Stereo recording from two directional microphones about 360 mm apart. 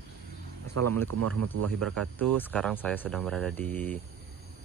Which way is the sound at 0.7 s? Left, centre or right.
Right.